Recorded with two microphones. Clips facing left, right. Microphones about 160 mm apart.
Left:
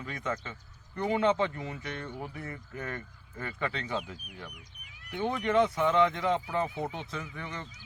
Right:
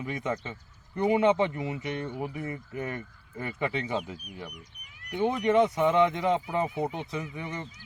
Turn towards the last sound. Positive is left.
turn(degrees=-15)  # may be behind; listen again after turning